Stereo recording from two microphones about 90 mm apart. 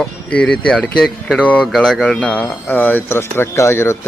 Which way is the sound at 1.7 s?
5° left (ahead or behind).